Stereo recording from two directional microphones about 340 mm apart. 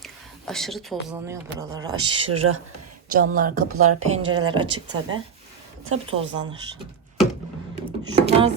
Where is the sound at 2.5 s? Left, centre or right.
Right.